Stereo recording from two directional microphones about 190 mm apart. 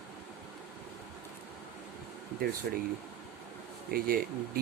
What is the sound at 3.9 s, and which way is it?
Speech, 50° right (ahead or behind).